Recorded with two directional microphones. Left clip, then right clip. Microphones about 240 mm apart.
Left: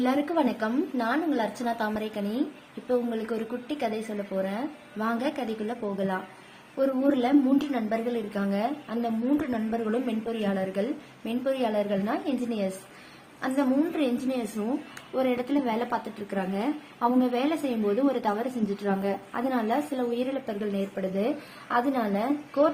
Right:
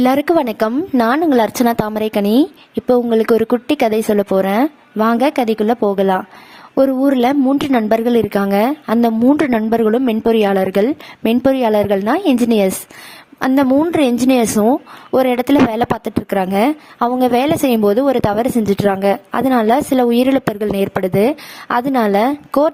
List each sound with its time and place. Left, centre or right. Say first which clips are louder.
0.0 s speech: right 12 dB; right